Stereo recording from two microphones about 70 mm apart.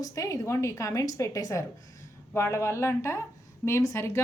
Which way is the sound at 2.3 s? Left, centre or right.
Left.